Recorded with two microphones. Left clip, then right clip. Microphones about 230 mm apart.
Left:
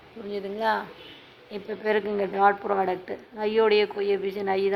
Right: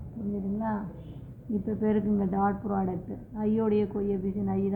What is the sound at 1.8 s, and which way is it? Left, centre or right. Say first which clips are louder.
A woman's voice: left 5 dB; left.